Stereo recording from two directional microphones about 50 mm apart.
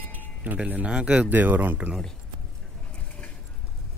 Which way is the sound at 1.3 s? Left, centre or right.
Right.